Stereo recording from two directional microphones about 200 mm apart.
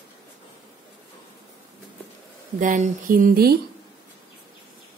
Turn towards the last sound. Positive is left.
turn(degrees=-45)  # may be behind; listen again after turning